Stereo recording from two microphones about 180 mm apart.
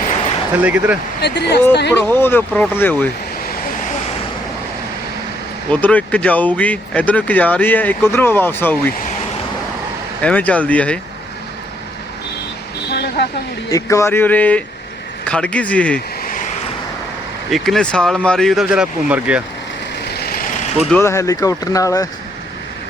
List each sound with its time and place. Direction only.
0.6 s speech: 10° right (ahead or behind)
1.2 s speech: 65° left (ahead or behind)
1.9 s speech: 10° left (ahead or behind)
5.7 s speech: 10° left (ahead or behind)
10.2 s speech: 10° left (ahead or behind)
12.9 s a sound: 65° left (ahead or behind)
13.7 s speech: 15° left (ahead or behind)
17.5 s speech: centre (ahead or behind)
20.1 s vehicle: 60° left (ahead or behind)
21.0 s speech: 15° left (ahead or behind)